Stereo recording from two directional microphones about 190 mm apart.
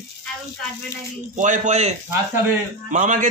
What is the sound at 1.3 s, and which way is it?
A man's voice, 40° right (ahead or behind).